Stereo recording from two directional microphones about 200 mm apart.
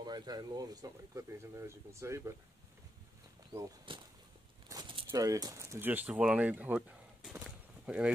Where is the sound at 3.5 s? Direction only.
20° right (ahead or behind).